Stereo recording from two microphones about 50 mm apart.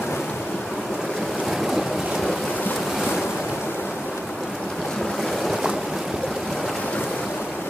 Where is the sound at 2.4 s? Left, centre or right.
Left.